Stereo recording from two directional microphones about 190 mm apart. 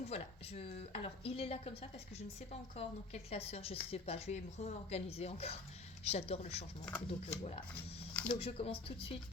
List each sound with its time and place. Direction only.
0.0 s speech: 35° left (ahead or behind)
6.8 s speech: 5° left (ahead or behind)
8.4 s speech: 30° left (ahead or behind)